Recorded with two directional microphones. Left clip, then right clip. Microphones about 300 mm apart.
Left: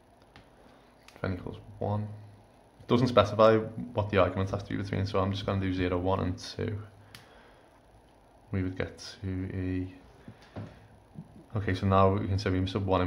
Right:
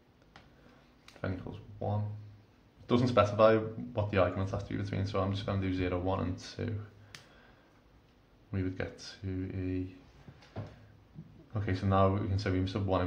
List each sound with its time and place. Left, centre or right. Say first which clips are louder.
1.2 s speech: left 4 dB; centre
8.5 s speech: left 3 dB; centre
11.5 s speech: left 4 dB; centre